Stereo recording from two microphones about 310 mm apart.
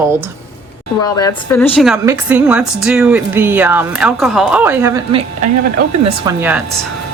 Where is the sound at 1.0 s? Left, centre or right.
Centre.